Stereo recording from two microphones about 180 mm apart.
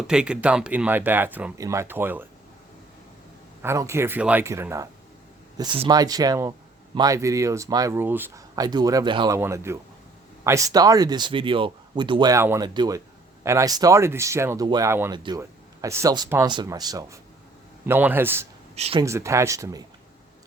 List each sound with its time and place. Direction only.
0.0 s speech: 5° right (ahead or behind)
3.6 s speech: 15° right (ahead or behind)
5.5 s speech: 25° right (ahead or behind); by 8.6 s 10° right (ahead or behind)
8.6 s speech: 20° right (ahead or behind)
9.4 s speech: 15° right (ahead or behind)
18.8 s speech: 30° right (ahead or behind)
19.0 s speech: 15° right (ahead or behind)